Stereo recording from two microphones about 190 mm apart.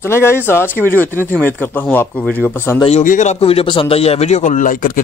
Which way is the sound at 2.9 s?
40° left (ahead or behind).